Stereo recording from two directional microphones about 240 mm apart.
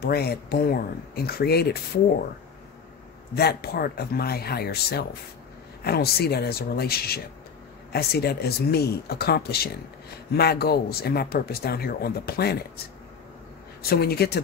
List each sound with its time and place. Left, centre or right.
0.0 s speech: left
3.3 s speech: left
13.8 s speech: left